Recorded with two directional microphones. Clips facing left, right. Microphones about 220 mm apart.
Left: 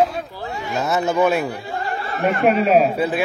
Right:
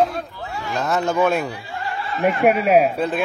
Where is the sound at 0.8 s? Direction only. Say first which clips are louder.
Left 1 dB; 10° left (ahead or behind).